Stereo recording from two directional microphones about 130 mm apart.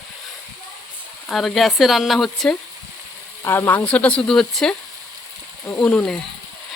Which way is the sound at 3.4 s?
20° left (ahead or behind).